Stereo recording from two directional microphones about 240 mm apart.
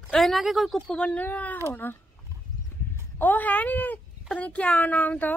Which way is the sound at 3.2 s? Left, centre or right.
Centre.